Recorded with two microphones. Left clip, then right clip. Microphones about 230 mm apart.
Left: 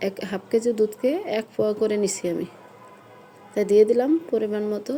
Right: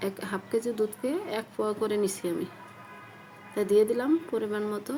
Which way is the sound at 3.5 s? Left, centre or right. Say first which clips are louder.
Left 6 dB; left.